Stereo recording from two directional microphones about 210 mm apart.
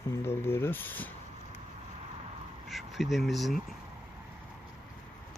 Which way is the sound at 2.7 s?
Centre (ahead or behind).